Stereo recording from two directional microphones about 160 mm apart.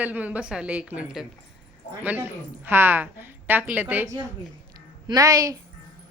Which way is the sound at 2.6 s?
15° right (ahead or behind).